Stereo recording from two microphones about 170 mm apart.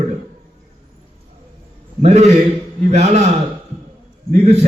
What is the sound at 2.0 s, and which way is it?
A man's voice, 40° right (ahead or behind).